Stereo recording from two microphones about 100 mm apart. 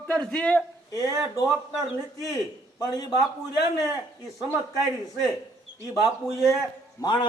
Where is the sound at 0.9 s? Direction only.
40° left (ahead or behind).